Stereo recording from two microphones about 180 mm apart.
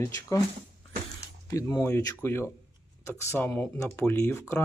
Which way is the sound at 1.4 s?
20° left (ahead or behind).